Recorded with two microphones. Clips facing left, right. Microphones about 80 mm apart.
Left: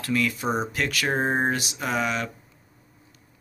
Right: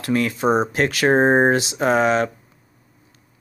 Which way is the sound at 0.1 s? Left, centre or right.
Right.